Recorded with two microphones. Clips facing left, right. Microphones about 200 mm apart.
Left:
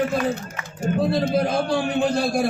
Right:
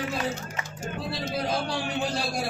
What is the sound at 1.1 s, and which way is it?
A man's voice, 55° left (ahead or behind).